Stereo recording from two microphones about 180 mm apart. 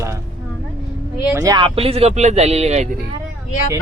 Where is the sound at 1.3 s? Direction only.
20° right (ahead or behind); by 2.9 s 40° right (ahead or behind).